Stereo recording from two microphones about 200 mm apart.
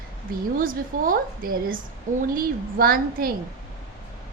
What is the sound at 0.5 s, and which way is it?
A woman's voice, 45° right (ahead or behind).